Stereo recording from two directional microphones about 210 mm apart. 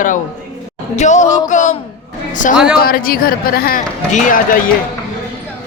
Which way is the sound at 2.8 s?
45° left (ahead or behind).